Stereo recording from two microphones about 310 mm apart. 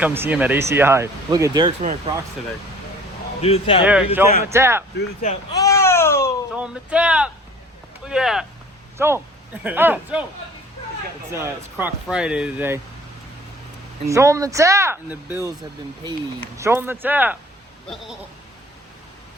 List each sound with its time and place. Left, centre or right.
0.0 s speech: centre
1.8 s speech: right
3.4 s speech: centre
3.8 s speech: centre
4.9 s speech: left
5.5 s babbling: centre
6.5 s speech: centre
11.3 s speech: centre
14.1 s speech: centre
16.6 s speech: centre